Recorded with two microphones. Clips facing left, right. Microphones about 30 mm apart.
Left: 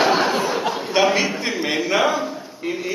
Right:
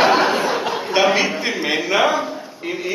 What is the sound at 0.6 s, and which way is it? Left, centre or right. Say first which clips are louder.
A man's voice: right 1 dB; centre.